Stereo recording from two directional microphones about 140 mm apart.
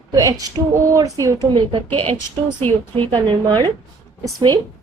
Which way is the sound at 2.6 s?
10° left (ahead or behind).